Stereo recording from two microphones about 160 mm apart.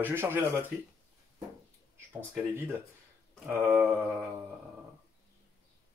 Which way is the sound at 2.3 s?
10° right (ahead or behind).